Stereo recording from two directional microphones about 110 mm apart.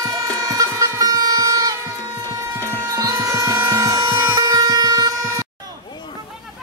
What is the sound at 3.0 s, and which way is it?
Music, 25° right (ahead or behind).